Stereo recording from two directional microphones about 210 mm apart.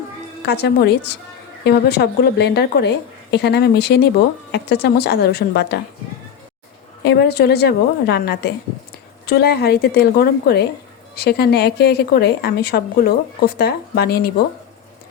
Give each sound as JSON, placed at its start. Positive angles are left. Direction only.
{"t": 0.4, "sound": "a woman's voice", "side_deg": 50}
{"t": 7.0, "sound": "a woman's voice", "side_deg": 50}